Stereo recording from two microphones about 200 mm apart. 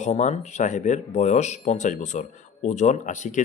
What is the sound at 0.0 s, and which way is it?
Speech, 35° left (ahead or behind).